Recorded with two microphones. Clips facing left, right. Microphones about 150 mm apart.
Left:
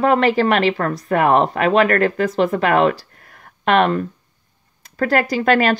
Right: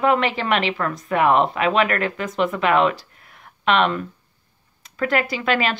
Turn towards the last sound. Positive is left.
turn(degrees=45)  # may be behind; listen again after turning